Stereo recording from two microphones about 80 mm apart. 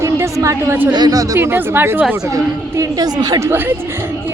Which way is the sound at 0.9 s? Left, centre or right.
Right.